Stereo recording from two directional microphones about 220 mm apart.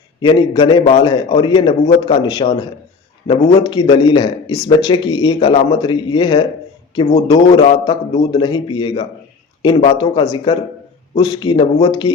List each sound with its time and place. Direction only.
0.2 s a man's voice: 20° left (ahead or behind)